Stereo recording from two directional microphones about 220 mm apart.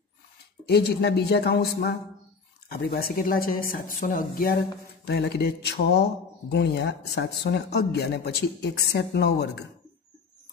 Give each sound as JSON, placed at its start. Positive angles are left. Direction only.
{"t": 0.7, "sound": "a woman's voice", "side_deg": 45}